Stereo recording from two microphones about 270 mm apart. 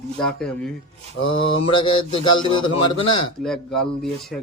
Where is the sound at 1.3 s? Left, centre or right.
Centre.